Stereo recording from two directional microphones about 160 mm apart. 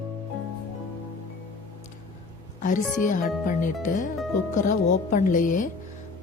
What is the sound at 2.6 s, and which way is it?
A woman's voice, 50° left (ahead or behind).